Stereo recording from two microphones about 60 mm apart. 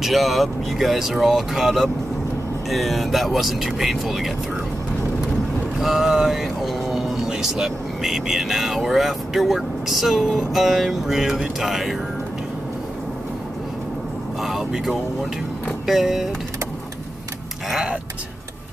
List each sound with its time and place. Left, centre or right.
0.0 s speech: centre
5.8 s speech: centre
14.4 s speech: centre
17.6 s a sound: centre